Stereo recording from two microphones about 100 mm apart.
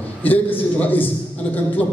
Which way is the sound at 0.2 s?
20° left (ahead or behind).